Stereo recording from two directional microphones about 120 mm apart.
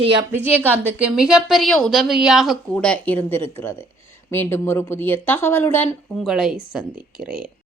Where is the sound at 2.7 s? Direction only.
10° left (ahead or behind).